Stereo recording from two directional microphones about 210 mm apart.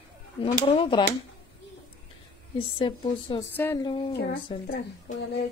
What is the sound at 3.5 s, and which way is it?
Speech, 10° left (ahead or behind).